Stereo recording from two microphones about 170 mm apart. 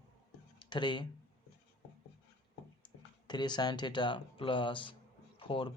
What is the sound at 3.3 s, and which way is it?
A man's voice, 25° left (ahead or behind).